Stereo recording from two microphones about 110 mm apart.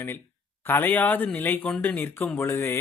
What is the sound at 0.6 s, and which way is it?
Speech, 20° left (ahead or behind).